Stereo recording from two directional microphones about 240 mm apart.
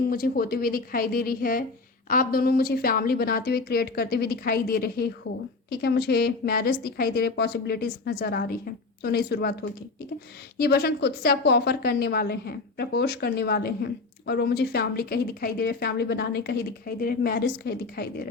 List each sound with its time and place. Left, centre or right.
0.1 s a woman's voice: left
10.6 s a woman's voice: left